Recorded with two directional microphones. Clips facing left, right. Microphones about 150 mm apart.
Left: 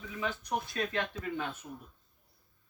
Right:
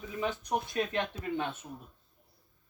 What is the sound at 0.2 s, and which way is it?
Speech, 20° right (ahead or behind).